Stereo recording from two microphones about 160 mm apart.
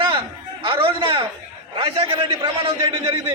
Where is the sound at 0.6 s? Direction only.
35° right (ahead or behind).